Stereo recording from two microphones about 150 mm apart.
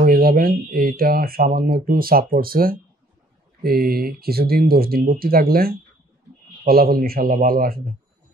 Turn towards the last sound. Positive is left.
turn(degrees=-75)  # may be behind; listen again after turning